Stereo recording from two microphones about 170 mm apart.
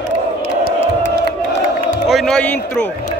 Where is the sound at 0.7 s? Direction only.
80° left.